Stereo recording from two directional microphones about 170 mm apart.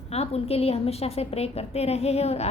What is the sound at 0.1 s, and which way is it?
A woman's voice, 35° left (ahead or behind).